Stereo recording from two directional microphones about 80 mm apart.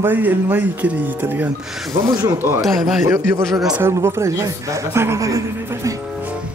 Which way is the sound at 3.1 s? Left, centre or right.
Right.